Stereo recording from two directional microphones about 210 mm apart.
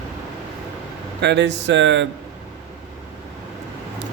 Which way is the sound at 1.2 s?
55° right (ahead or behind).